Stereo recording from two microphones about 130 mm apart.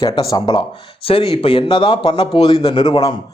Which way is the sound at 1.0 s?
45° left (ahead or behind).